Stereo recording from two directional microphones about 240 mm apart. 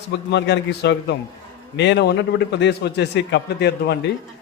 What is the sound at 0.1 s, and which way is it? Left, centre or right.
A man's voice, left.